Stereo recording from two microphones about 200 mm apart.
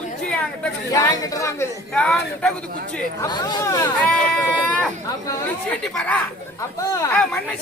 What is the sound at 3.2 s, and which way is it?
Speech, 20° left (ahead or behind).